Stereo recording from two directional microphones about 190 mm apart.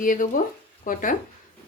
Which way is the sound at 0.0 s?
45° left (ahead or behind).